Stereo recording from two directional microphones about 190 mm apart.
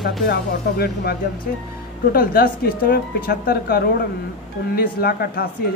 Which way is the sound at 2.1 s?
50° left (ahead or behind).